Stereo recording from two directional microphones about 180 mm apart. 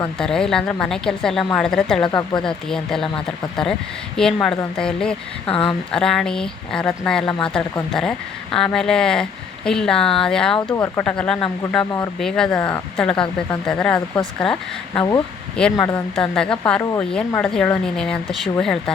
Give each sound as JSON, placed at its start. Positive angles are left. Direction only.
{"t": 0.2, "sound": "speech", "side_deg": 5}
{"t": 5.5, "sound": "speech", "side_deg": 30}
{"t": 5.9, "sound": "speech", "side_deg": 5}
{"t": 10.7, "sound": "speech", "side_deg": 20}
{"t": 11.0, "sound": "speech", "side_deg": 5}